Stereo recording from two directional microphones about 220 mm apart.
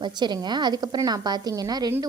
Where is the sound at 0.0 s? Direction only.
20° right (ahead or behind).